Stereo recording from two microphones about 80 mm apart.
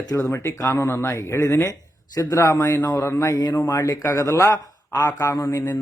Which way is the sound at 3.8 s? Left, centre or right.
Left.